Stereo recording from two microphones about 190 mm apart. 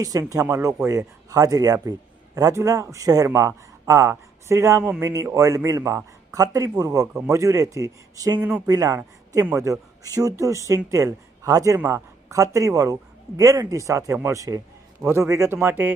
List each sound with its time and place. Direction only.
0.0 s a man's voice: 20° right (ahead or behind)
8.4 s speech: 5° right (ahead or behind)
8.6 s speech: 20° right (ahead or behind)